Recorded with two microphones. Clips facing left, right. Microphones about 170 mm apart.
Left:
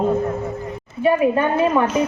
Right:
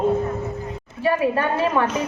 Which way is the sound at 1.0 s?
20° left (ahead or behind).